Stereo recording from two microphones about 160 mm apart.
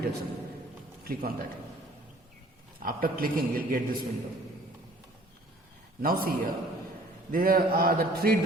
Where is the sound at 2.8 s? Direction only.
65° right (ahead or behind).